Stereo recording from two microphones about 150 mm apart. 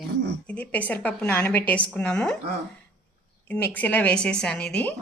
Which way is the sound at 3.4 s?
15° left (ahead or behind).